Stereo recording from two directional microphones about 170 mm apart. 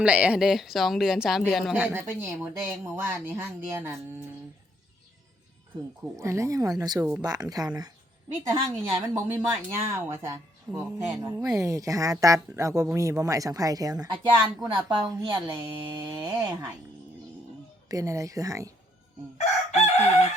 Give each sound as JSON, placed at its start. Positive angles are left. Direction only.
{"t": 0.0, "sound": "speech", "side_deg": -5}
{"t": 6.1, "sound": "a woman's voice", "side_deg": -20}
{"t": 17.8, "sound": "a woman's voice", "side_deg": -20}